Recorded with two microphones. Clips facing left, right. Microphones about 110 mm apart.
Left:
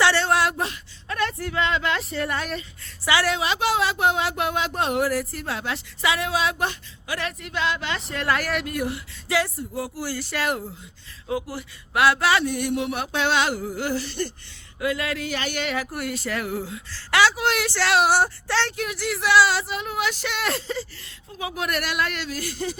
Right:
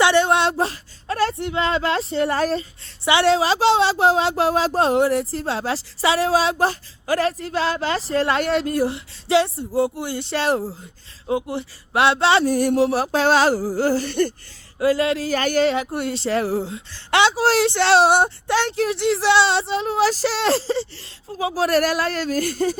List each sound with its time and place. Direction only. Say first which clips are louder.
0.0 s speech: right 4 dB; 20° right (ahead or behind); by 14.1 s 40° right (ahead or behind)
14.1 s speech: right 9 dB; 55° right (ahead or behind)
14.8 s speech: right 7 dB; 30° right (ahead or behind)
15.4 s speech: right 10 dB; 40° right (ahead or behind)
15.7 s speech: right 5 dB; 25° right (ahead or behind)
18.8 s speech: right 7 dB; 30° right (ahead or behind); by 22.8 s 45° right (ahead or behind)